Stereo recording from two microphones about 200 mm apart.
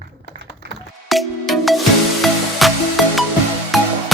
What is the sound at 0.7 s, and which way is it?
Music, centre (ahead or behind).